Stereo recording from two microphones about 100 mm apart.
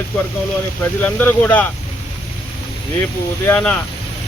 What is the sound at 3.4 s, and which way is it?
Speech, 15° left (ahead or behind).